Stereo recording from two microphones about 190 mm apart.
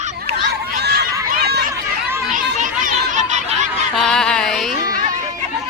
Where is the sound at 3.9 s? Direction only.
5° left (ahead or behind).